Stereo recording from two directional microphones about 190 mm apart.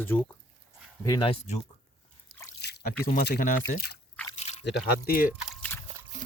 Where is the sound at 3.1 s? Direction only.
55° left (ahead or behind).